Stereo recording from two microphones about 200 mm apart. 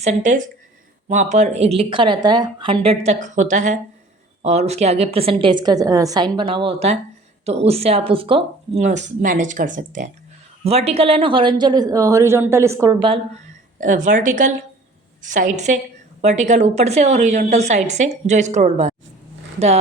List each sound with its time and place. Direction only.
0.0 s a woman's voice: 35° right (ahead or behind); by 13.1 s 20° right (ahead or behind)
13.7 s a woman's voice: 40° right (ahead or behind)